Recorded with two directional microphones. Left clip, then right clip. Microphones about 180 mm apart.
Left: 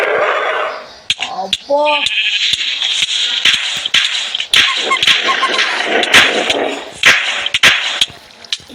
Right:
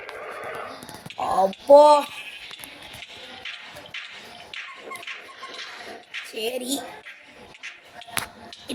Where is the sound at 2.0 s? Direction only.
55° left (ahead or behind).